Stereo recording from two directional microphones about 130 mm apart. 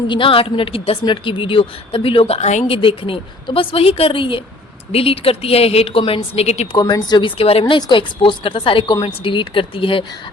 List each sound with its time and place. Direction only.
0.1 s a woman's voice: 40° left (ahead or behind); by 2.6 s 60° left (ahead or behind)
2.6 s a woman's voice: 45° left (ahead or behind)
6.7 s a woman's voice: 35° left (ahead or behind)
7.6 s a woman's voice: 35° left (ahead or behind)